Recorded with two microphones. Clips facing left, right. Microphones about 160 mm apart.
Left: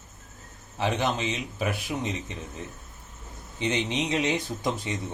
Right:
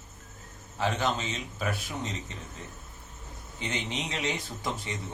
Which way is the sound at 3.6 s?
20° left (ahead or behind).